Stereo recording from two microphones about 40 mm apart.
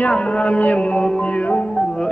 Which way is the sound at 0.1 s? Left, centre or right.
Left.